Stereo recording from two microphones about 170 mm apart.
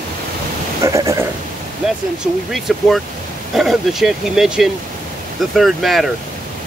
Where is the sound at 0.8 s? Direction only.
20° right (ahead or behind).